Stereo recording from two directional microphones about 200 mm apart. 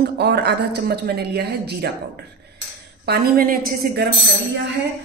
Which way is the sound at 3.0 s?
50° right (ahead or behind).